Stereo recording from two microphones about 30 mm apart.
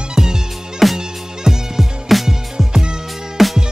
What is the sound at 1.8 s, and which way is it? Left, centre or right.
Music, centre.